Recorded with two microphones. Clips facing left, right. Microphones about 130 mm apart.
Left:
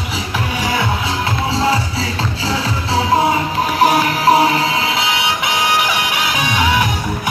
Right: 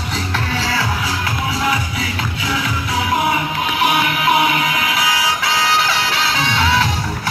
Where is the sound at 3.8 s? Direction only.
35° left (ahead or behind); by 6.9 s 15° left (ahead or behind).